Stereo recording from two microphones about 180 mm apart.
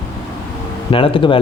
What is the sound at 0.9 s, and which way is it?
Speech, 30° left (ahead or behind).